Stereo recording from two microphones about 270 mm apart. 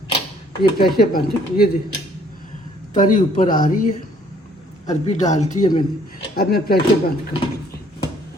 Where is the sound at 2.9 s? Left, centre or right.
Left.